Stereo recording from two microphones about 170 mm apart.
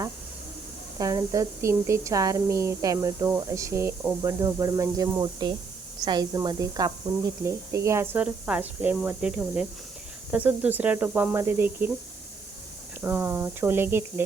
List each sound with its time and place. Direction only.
0.9 s speech: 20° right (ahead or behind)
13.0 s speech: 10° right (ahead or behind)